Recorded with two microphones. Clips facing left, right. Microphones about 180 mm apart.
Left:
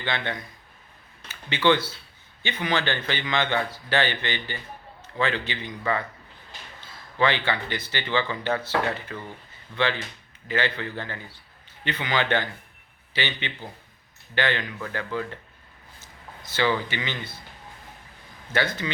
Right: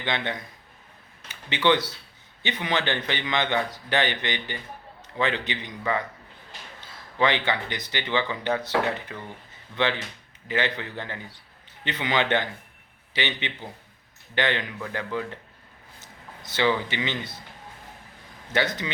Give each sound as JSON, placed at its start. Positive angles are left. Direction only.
{"t": 0.0, "sound": "a man's voice", "side_deg": -20}
{"t": 1.5, "sound": "a man's voice", "side_deg": -20}
{"t": 7.2, "sound": "speech", "side_deg": -20}
{"t": 10.5, "sound": "a man's voice", "side_deg": -20}
{"t": 16.5, "sound": "a man's voice", "side_deg": -20}
{"t": 18.5, "sound": "a man's voice", "side_deg": -20}